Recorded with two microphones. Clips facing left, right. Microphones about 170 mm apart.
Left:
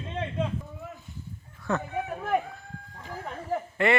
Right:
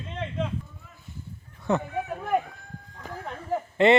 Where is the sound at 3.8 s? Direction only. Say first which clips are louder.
Right 6 dB; 25° right (ahead or behind).